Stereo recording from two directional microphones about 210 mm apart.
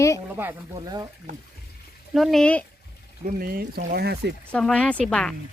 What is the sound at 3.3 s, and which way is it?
Speech, 45° right (ahead or behind).